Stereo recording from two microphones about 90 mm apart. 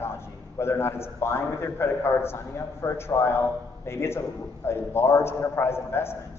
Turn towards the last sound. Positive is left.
turn(degrees=25)  # may be behind; listen again after turning